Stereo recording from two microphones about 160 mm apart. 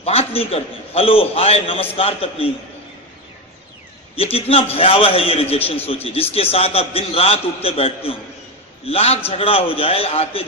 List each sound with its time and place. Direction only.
0.0 s a man's voice: 40° left (ahead or behind)
4.1 s a man's voice: 35° left (ahead or behind)